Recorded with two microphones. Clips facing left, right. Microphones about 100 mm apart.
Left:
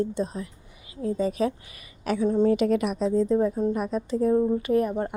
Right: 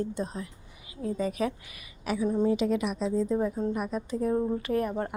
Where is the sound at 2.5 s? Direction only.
60° left (ahead or behind).